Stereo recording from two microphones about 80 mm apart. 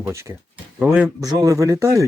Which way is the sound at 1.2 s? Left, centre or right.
Right.